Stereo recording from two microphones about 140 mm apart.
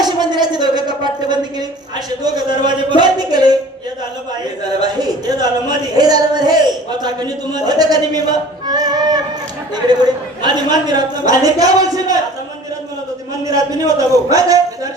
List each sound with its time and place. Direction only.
0.0 s a sound: 30° right (ahead or behind)
2.0 s a man's voice: 30° right (ahead or behind)
4.8 s a man's voice: 30° right (ahead or behind)
13.5 s a man's voice: 25° right (ahead or behind)